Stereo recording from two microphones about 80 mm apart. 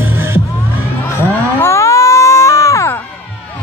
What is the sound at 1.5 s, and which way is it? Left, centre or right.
Music, left.